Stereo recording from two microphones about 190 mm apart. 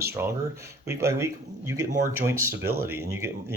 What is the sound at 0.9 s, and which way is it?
Speech, 15° right (ahead or behind).